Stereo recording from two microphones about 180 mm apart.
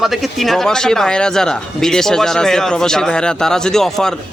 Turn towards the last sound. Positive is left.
turn(degrees=0)  # may be behind; listen again after turning